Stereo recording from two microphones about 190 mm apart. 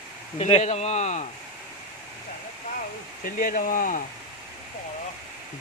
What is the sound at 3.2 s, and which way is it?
Speech, 45° left (ahead or behind).